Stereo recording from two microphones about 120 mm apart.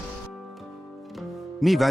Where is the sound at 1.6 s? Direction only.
Centre (ahead or behind).